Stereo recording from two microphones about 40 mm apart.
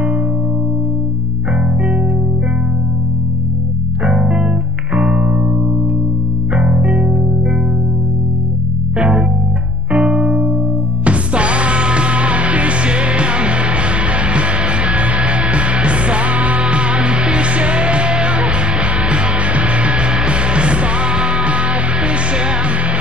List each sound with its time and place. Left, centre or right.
4.0 s music: right
8.9 s music: right